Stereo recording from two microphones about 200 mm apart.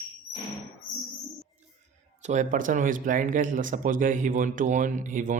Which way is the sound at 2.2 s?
40° right (ahead or behind).